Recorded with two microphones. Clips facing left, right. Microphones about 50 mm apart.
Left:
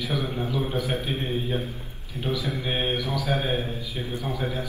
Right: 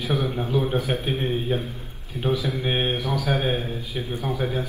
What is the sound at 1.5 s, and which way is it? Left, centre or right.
A man's voice, right.